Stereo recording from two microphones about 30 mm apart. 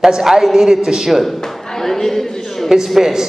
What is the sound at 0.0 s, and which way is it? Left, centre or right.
A woman's voice, centre.